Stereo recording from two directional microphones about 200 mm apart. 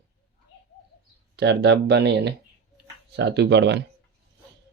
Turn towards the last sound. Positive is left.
turn(degrees=-60)  # may be behind; listen again after turning